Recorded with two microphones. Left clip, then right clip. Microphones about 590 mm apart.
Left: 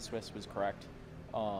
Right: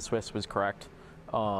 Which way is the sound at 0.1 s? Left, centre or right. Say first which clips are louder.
Right 11 dB; right.